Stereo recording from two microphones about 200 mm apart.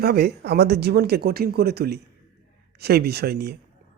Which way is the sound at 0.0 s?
50° right (ahead or behind).